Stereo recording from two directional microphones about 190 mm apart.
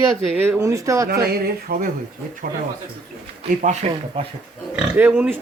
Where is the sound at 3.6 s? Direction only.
35° right (ahead or behind).